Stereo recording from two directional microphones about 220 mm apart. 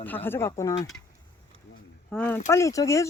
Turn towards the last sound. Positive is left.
turn(degrees=15)  # may be behind; listen again after turning